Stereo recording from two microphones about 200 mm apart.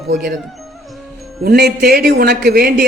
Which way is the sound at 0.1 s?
50° right (ahead or behind).